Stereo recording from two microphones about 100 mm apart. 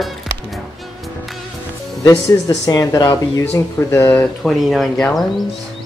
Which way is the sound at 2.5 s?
40° left (ahead or behind).